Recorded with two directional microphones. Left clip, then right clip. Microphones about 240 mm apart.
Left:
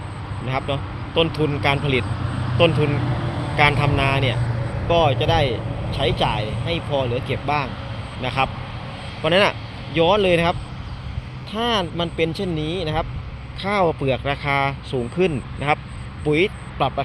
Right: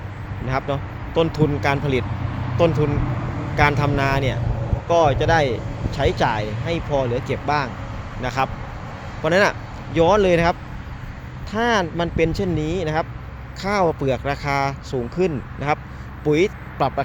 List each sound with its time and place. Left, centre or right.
0.4 s speech: centre
3.0 s vehicle: left
3.6 s speech: centre
16.2 s speech: centre